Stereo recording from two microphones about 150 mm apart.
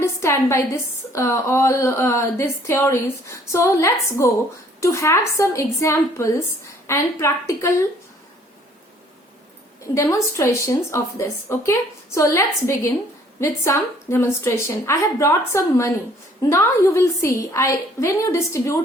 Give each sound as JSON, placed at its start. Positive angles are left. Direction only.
{"t": 0.0, "sound": "a sound", "side_deg": 20}
{"t": 1.1, "sound": "a woman's voice", "side_deg": 20}
{"t": 9.8, "sound": "a woman's voice", "side_deg": 20}